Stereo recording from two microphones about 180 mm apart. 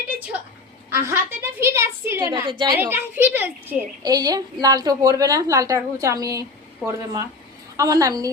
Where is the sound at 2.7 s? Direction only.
10° right (ahead or behind).